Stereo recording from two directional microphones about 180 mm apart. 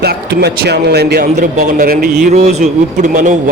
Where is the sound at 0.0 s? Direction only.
60° right (ahead or behind).